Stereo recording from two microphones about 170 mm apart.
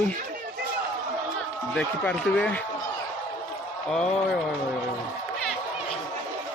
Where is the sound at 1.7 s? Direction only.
5° left (ahead or behind).